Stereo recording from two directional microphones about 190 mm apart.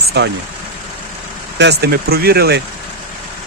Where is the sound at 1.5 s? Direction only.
60° right (ahead or behind).